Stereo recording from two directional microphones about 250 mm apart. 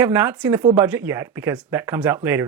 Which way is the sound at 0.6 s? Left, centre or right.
Right.